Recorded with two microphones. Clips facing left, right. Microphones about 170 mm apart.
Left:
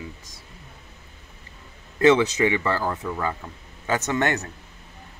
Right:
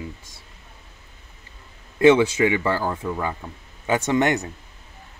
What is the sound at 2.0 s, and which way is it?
Speech, 10° right (ahead or behind).